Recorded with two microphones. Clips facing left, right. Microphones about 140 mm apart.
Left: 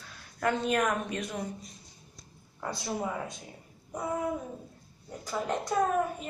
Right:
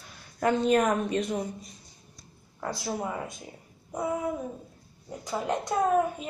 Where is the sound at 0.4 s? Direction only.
25° right (ahead or behind).